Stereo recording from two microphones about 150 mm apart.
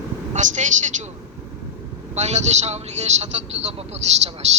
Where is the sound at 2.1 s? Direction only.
50° right (ahead or behind).